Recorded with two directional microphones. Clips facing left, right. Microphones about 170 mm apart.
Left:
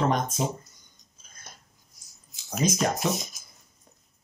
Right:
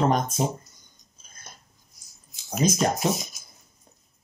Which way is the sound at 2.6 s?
35° right (ahead or behind).